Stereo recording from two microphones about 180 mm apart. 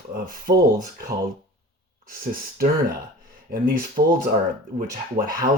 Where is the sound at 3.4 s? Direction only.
50° right (ahead or behind).